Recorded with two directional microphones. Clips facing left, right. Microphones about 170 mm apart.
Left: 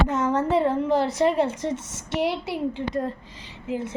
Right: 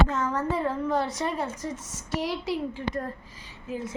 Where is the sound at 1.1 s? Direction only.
70° left (ahead or behind).